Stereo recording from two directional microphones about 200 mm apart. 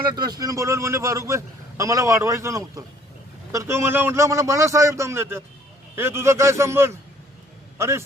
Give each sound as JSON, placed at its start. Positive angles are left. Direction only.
{"t": 0.1, "sound": "a man's voice", "side_deg": -20}